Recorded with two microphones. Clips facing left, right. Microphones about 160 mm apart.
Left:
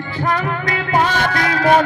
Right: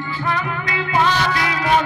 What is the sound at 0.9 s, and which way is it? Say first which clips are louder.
Music: left 1 dB; 50° left (ahead or behind).